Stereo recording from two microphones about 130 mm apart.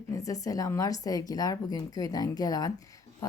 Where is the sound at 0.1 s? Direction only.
25° left (ahead or behind).